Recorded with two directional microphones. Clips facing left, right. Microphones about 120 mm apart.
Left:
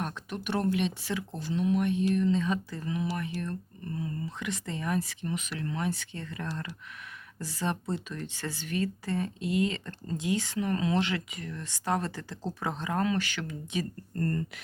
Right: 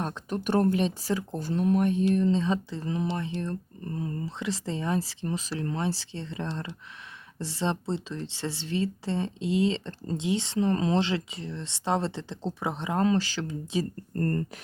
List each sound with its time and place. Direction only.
0.0 s speech: 30° right (ahead or behind)
14.2 s speech: 45° right (ahead or behind)